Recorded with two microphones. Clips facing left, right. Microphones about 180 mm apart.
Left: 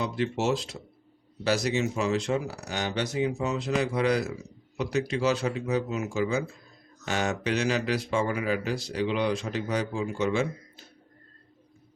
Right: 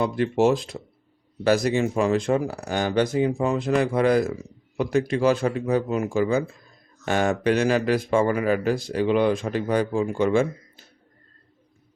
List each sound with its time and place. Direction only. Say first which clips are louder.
0.0 s a man's voice: right 7 dB; 50° right (ahead or behind)